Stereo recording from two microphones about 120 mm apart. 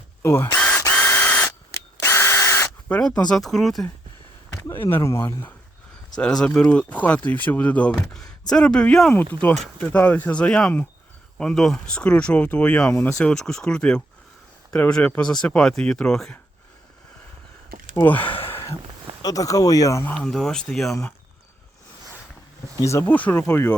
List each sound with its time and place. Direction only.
0.2 s speech: 20° left (ahead or behind)
0.8 s drill: 20° left (ahead or behind)
2.9 s speech: 5° left (ahead or behind)
4.5 s speech: 20° left (ahead or behind)
6.1 s speech: 10° left (ahead or behind)
13.1 s speech: 5° left (ahead or behind)
17.9 s speech: 15° left (ahead or behind)
18.3 s a sound: 50° left (ahead or behind)
19.2 s speech: 30° left (ahead or behind)
20.2 s speech: 5° left (ahead or behind)
22.8 s speech: 25° left (ahead or behind)